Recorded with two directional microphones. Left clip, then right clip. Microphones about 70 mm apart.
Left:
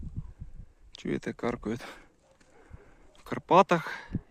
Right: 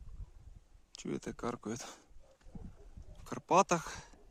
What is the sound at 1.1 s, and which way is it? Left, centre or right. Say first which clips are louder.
Speech: left 7 dB; centre.